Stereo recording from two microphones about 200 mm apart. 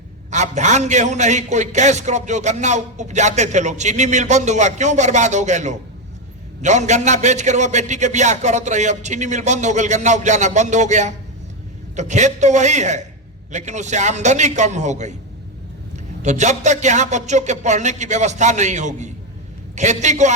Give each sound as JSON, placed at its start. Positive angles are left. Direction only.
{"t": 0.3, "sound": "a man's voice", "side_deg": -35}
{"t": 16.2, "sound": "a man's voice", "side_deg": -35}